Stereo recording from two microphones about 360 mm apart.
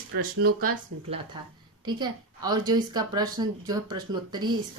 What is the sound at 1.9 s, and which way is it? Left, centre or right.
A woman's voice, centre.